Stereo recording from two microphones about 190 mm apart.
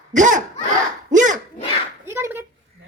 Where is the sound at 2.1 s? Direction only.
10° right (ahead or behind).